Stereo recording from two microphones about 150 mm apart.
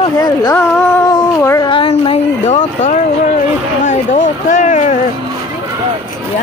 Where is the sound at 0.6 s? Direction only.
15° left (ahead or behind).